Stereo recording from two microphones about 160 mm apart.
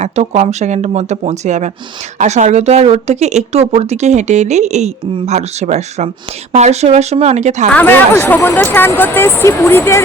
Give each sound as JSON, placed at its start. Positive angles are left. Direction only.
{"t": 0.0, "sound": "speech", "side_deg": -45}
{"t": 7.7, "sound": "speech", "side_deg": 10}